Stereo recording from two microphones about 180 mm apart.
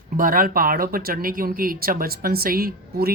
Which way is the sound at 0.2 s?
50° right (ahead or behind).